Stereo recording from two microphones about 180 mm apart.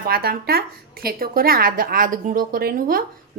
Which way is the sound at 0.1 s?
55° right (ahead or behind).